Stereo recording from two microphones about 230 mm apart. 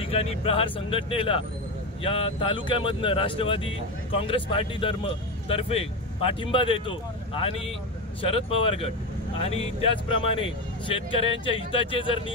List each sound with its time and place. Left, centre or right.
0.0 s speech: left